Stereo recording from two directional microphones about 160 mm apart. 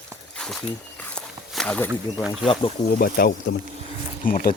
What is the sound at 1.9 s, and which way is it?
Speech, 5° right (ahead or behind).